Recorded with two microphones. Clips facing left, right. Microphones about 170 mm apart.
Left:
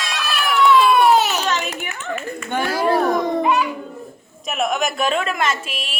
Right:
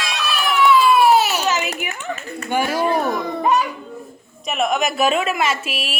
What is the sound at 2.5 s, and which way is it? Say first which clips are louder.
Speech: right 2 dB; 10° right (ahead or behind).